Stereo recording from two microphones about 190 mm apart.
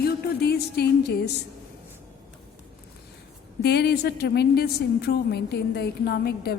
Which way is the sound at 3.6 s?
60° left (ahead or behind).